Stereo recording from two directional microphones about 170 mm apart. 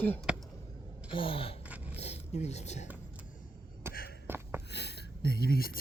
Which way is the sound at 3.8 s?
15° right (ahead or behind).